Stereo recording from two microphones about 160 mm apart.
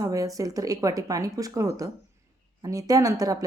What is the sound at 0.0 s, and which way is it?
Speech, 20° right (ahead or behind).